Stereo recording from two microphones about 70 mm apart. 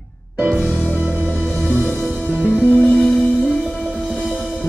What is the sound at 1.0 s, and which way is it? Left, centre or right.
Music, right.